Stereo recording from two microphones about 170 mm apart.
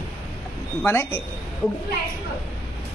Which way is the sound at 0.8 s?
15° left (ahead or behind).